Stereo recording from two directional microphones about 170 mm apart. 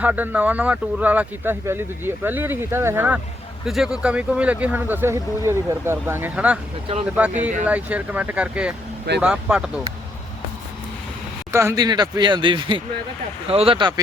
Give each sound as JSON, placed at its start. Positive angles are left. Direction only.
{"t": 0.0, "sound": "speech", "side_deg": -10}
{"t": 6.9, "sound": "speech", "side_deg": -35}
{"t": 7.6, "sound": "speech", "side_deg": -10}
{"t": 11.5, "sound": "speech", "side_deg": -20}